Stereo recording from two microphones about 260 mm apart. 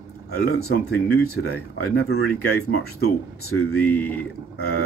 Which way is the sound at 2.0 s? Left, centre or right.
Left.